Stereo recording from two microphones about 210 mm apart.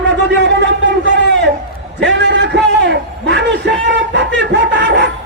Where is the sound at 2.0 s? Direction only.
60° right (ahead or behind).